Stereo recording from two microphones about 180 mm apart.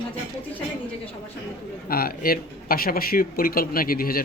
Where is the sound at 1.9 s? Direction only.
55° left (ahead or behind).